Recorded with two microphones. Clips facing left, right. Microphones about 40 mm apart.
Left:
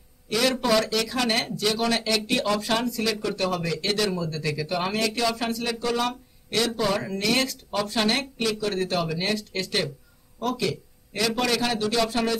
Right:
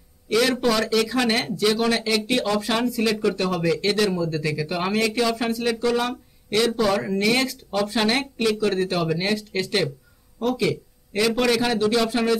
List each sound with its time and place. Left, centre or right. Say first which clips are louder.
0.6 s speech: right 2 dB; centre
9.0 s speech: right 4 dB; centre
9.3 s speech: right 3 dB; centre